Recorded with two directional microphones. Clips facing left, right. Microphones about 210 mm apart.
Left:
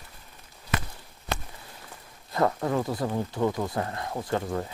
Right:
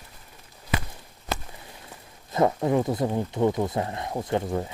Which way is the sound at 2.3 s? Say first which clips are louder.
Right 3 dB; 20° right (ahead or behind).